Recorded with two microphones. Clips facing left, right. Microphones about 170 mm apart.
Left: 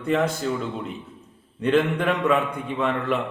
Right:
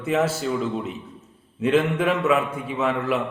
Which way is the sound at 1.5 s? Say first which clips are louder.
Right 1 dB; 5° right (ahead or behind).